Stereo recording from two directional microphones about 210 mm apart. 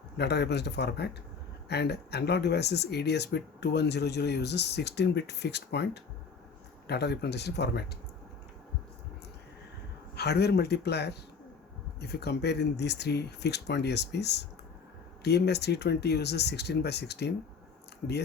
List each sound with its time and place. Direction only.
0.2 s speech: 50° left (ahead or behind)
10.2 s speech: 50° left (ahead or behind)